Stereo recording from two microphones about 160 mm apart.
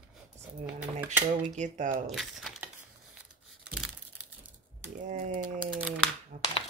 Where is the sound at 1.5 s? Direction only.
50° right (ahead or behind).